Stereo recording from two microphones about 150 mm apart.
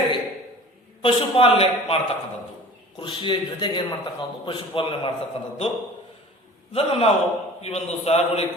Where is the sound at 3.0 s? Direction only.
30° left (ahead or behind).